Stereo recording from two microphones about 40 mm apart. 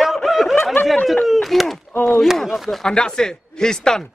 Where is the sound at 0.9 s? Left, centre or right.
Centre.